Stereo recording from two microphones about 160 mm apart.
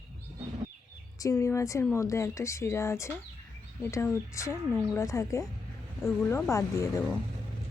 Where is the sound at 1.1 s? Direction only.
20° left (ahead or behind).